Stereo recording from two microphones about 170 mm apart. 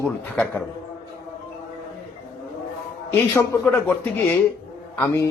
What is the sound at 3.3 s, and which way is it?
Speech, 15° left (ahead or behind).